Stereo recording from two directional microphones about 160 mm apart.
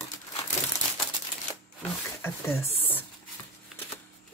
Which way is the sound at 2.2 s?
15° left (ahead or behind).